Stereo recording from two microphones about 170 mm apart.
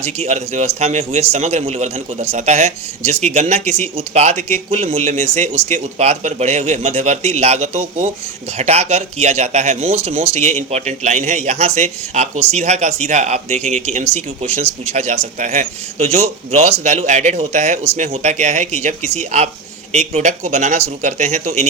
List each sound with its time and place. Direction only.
0.0 s a man's voice: 40° right (ahead or behind)